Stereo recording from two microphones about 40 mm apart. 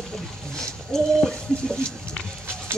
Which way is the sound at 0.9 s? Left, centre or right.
Centre.